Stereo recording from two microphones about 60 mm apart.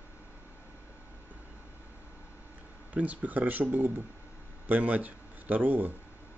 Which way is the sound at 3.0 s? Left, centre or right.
Right.